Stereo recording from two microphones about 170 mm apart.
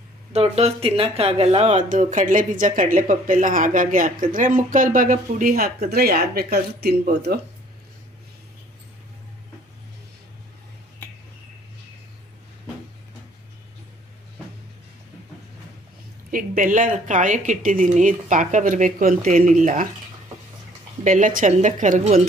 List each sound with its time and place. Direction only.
0.3 s speech: 40° right (ahead or behind); by 7.3 s 70° right (ahead or behind)
16.3 s speech: 50° right (ahead or behind)
21.0 s speech: 50° right (ahead or behind)